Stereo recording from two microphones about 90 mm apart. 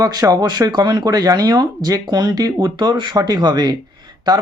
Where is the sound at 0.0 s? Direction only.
45° right (ahead or behind).